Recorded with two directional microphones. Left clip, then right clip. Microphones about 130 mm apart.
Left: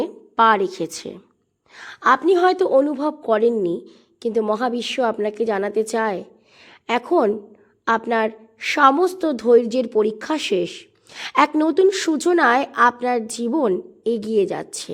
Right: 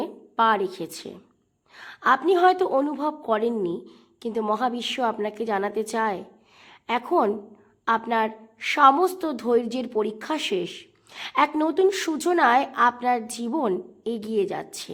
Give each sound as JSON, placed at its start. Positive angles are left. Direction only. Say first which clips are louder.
{"t": 0.0, "sound": "a woman's voice", "louder": "left 6 dB", "side_deg": 40}
{"t": 11.5, "sound": "a woman's voice", "louder": "left 5 dB", "side_deg": 35}